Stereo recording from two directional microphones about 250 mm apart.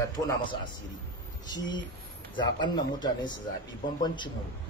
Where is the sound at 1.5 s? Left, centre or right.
Centre.